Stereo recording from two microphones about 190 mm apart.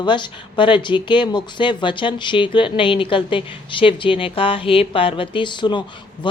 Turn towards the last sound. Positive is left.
turn(degrees=25)  # may be behind; listen again after turning